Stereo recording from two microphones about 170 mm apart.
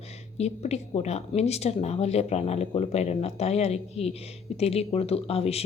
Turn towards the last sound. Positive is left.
turn(degrees=35)  # may be behind; listen again after turning